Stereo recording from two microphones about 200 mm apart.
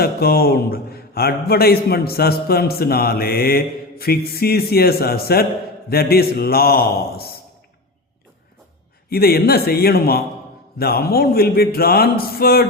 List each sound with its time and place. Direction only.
0.0 s a man's voice: 50° left (ahead or behind)
9.0 s a man's voice: 50° left (ahead or behind)